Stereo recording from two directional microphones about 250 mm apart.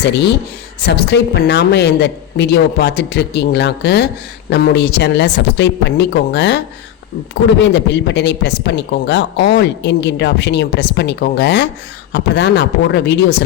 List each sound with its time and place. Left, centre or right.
0.0 s a woman's voice: left
7.6 s a woman's voice: left